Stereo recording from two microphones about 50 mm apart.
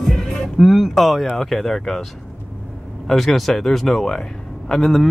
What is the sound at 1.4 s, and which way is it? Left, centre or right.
Speech, centre.